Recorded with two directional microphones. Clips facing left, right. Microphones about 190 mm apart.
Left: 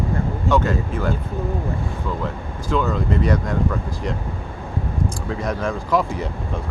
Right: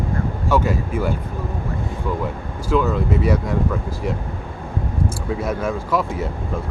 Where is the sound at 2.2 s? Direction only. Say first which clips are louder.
Right 1 dB; 5° right (ahead or behind).